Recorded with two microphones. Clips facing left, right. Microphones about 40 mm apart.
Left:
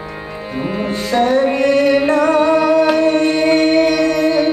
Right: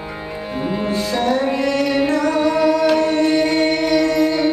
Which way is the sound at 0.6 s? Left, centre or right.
Centre.